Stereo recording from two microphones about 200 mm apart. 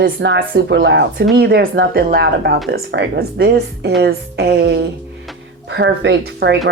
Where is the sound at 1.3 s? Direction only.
50° right (ahead or behind).